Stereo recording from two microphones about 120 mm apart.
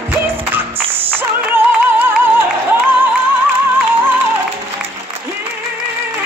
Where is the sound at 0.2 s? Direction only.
15° right (ahead or behind).